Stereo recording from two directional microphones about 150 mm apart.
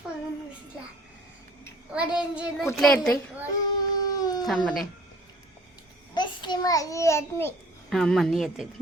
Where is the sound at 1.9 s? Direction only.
5° right (ahead or behind).